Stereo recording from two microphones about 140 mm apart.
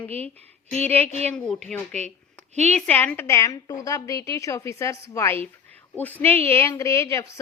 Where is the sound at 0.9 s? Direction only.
10° left (ahead or behind).